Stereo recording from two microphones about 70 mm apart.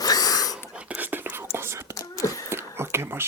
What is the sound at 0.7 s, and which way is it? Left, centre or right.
Whispering, centre.